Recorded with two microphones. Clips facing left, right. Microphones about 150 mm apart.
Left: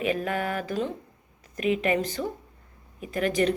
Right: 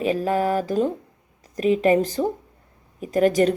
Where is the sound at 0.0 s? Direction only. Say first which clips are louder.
Right 6 dB; 35° right (ahead or behind).